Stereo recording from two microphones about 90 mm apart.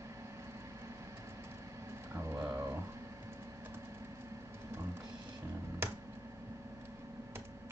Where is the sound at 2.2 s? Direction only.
30° right (ahead or behind).